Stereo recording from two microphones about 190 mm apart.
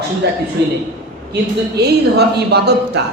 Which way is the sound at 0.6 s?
60° right (ahead or behind).